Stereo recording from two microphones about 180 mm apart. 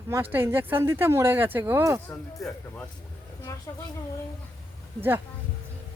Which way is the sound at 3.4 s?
15° left (ahead or behind).